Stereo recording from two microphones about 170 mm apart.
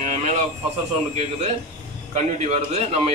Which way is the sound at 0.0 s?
45° right (ahead or behind).